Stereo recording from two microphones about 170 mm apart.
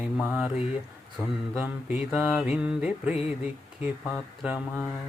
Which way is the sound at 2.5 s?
5° right (ahead or behind).